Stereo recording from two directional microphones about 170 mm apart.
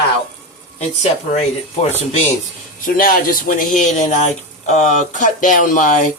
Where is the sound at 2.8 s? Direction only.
55° left (ahead or behind).